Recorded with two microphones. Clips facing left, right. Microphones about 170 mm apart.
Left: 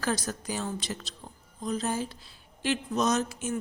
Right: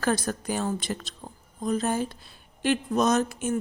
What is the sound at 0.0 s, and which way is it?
A woman's voice, 55° right (ahead or behind).